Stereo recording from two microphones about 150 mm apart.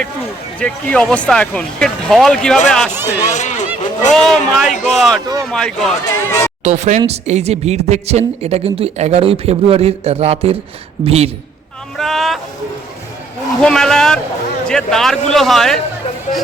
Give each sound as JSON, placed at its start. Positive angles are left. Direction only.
{"t": 0.6, "sound": "speech", "side_deg": 5}
{"t": 2.9, "sound": "speech", "side_deg": -15}
{"t": 3.2, "sound": "speech", "side_deg": 55}
{"t": 4.1, "sound": "speech", "side_deg": 5}
{"t": 4.7, "sound": "a man's voice", "side_deg": 50}
{"t": 4.9, "sound": "speech", "side_deg": 0}
{"t": 6.1, "sound": "speech", "side_deg": 25}
{"t": 6.7, "sound": "speech", "side_deg": -50}
{"t": 11.9, "sound": "speech", "side_deg": 0}
{"t": 13.6, "sound": "speech", "side_deg": 5}